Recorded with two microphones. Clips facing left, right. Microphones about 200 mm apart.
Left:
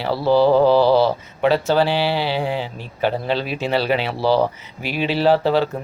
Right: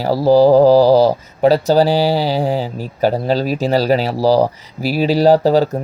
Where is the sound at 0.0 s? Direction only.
40° right (ahead or behind).